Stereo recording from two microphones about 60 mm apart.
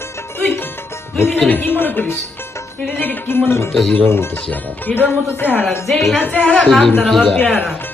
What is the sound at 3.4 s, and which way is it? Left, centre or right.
Speech, left.